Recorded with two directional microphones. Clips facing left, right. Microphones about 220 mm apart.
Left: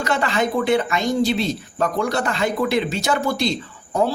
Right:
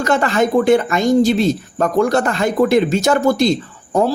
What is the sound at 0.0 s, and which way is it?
Speech, 45° right (ahead or behind).